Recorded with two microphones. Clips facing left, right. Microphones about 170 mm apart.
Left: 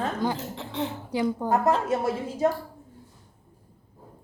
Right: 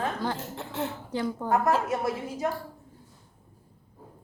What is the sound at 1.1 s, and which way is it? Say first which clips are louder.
Speech: left 5 dB; 15° left (ahead or behind).